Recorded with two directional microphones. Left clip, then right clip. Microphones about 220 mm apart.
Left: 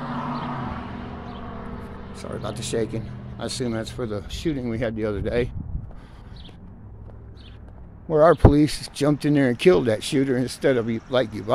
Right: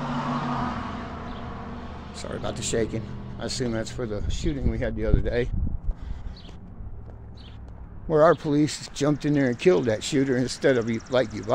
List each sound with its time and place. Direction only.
0.0 s vehicle: 40° right (ahead or behind)
2.1 s speech: 5° left (ahead or behind)
4.1 s speech: 25° left (ahead or behind)
8.1 s speech: 10° left (ahead or behind)
8.5 s speech: 20° left (ahead or behind)